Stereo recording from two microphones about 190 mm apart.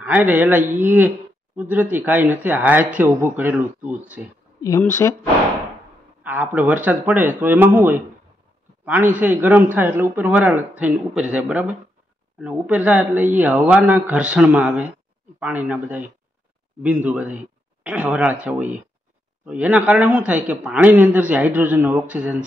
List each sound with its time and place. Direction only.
0.0 s a man's voice: 10° right (ahead or behind)
4.6 s speech: 15° left (ahead or behind)
6.2 s a man's voice: 10° right (ahead or behind)